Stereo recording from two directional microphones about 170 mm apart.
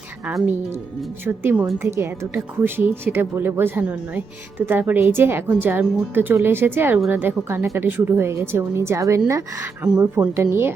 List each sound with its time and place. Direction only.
0.3 s a woman's voice: 10° right (ahead or behind)